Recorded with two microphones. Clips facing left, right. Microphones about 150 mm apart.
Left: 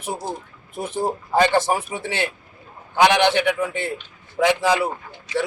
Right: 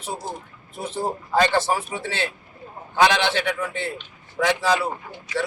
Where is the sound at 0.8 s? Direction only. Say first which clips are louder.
Left 3 dB; 15° left (ahead or behind).